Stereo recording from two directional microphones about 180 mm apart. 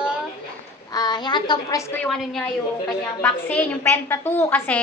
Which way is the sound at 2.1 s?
Centre (ahead or behind).